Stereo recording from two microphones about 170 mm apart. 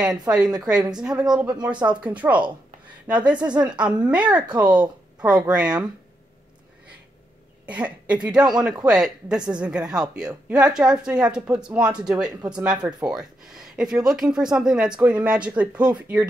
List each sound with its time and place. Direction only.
0.6 s speech: 5° right (ahead or behind)
1.7 s speech: 25° right (ahead or behind)
2.0 s speech: 10° right (ahead or behind)
4.6 s speech: 25° right (ahead or behind)
5.2 s speech: 5° right (ahead or behind)
7.6 s speech: 10° right (ahead or behind)